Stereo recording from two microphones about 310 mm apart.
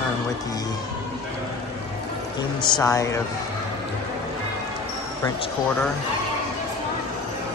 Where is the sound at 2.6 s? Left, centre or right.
Centre.